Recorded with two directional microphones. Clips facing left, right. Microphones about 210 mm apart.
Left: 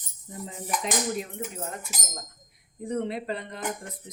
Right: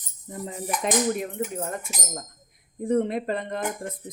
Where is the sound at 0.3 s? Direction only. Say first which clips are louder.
Right 3 dB; 55° right (ahead or behind).